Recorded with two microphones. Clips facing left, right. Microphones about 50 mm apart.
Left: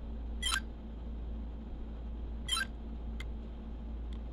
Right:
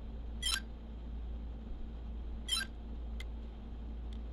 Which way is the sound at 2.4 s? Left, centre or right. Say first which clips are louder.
Left 3 dB; centre.